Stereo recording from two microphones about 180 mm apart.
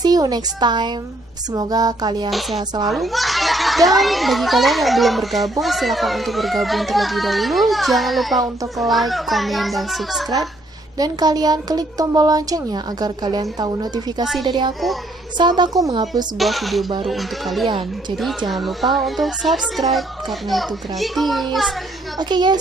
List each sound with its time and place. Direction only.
0.0 s a woman's voice: 20° right (ahead or behind)
2.9 s a child's voice: centre (ahead or behind)
11.0 s a woman's voice: 20° right (ahead or behind)
16.3 s a child's voice: centre (ahead or behind)
22.3 s a woman's voice: 25° right (ahead or behind)